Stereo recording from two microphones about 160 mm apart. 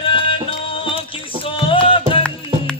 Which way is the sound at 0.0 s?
35° left (ahead or behind).